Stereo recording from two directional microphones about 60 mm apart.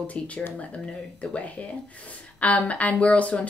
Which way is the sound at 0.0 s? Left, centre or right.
Left.